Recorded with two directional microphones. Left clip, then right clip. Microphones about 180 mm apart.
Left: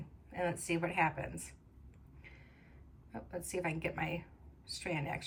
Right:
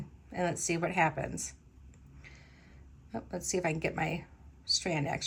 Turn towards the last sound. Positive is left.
turn(degrees=-10)  # may be behind; listen again after turning